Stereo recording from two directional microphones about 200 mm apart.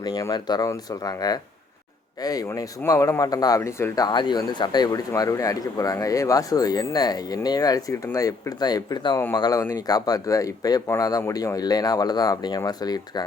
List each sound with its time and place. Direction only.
0.0 s speech: 20° left (ahead or behind)